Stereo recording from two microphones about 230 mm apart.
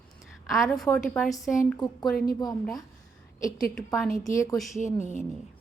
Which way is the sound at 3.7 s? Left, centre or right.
Centre.